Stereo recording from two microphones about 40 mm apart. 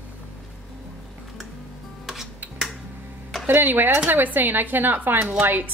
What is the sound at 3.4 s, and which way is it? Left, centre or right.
A woman's voice, right.